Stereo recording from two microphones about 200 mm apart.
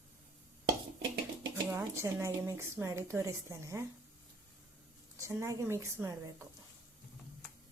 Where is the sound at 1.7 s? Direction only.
15° right (ahead or behind).